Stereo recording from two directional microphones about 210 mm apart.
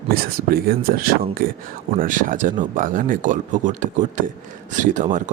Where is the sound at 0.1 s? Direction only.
45° right (ahead or behind).